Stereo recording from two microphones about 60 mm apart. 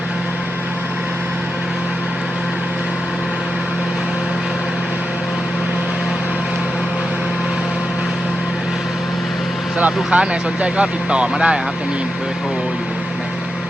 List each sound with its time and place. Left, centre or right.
9.7 s speech: right